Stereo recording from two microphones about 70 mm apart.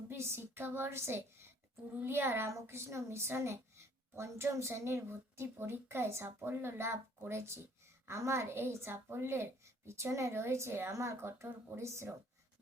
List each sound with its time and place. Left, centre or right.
0.1 s a woman's voice: right